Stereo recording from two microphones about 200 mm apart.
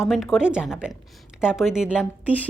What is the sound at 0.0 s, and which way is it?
A woman's voice, centre (ahead or behind).